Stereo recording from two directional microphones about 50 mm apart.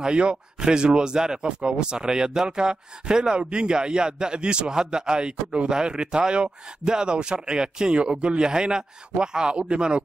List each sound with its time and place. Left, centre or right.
0.0 s speech: centre